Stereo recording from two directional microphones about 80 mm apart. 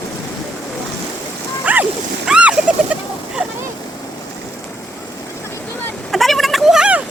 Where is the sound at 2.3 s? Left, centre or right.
Centre.